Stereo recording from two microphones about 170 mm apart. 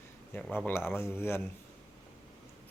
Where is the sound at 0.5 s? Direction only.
15° left (ahead or behind).